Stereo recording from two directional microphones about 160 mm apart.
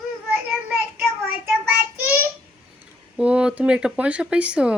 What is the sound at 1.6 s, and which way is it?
Child singing, 15° right (ahead or behind).